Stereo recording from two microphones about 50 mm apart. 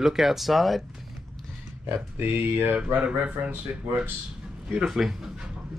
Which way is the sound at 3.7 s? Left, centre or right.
Right.